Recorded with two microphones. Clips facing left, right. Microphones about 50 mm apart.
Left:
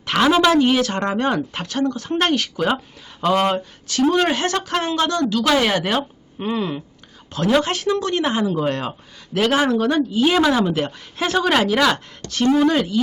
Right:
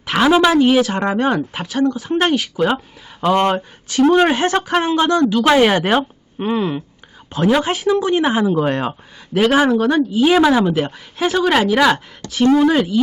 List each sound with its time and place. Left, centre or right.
0.0 s a woman's voice: centre
3.5 s a woman's voice: right